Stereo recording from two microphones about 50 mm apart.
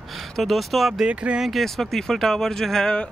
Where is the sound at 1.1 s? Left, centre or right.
Right.